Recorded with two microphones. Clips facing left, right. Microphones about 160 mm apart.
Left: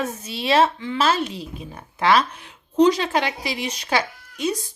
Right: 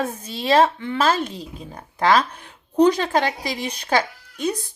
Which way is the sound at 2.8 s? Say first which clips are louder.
Even; 55° right (ahead or behind).